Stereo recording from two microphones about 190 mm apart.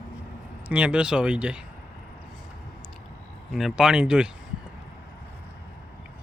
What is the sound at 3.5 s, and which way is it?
Speech, centre (ahead or behind).